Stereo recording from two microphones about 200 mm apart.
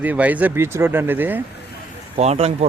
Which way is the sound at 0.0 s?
10° right (ahead or behind).